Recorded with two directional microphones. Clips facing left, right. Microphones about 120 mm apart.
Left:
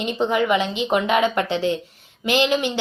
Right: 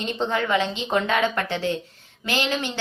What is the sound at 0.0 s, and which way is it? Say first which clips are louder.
A woman's voice: left 4 dB; 15° left (ahead or behind).